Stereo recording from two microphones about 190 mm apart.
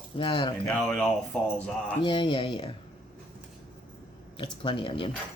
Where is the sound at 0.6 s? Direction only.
5° left (ahead or behind).